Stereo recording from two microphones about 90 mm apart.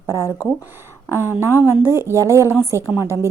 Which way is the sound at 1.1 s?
25° right (ahead or behind).